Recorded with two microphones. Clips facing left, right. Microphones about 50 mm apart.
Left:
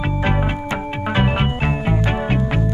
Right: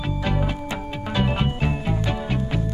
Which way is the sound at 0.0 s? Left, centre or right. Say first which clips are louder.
Left 5 dB; left.